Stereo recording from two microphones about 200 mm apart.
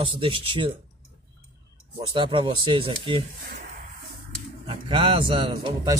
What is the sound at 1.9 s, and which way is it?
Speech, 25° right (ahead or behind).